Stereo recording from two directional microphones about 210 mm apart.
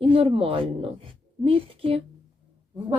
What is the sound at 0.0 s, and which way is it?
Speech, 25° right (ahead or behind).